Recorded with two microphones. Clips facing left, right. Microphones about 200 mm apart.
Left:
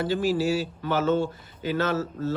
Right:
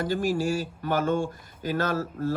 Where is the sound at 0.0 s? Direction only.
45° right (ahead or behind).